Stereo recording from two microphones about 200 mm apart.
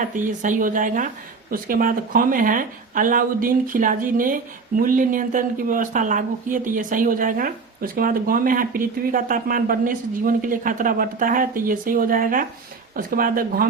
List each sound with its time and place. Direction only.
0.0 s speech: 40° right (ahead or behind)